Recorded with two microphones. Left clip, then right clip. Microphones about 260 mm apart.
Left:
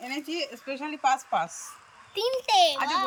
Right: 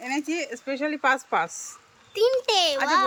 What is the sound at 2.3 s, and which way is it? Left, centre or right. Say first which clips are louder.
Speech: left 4 dB; centre.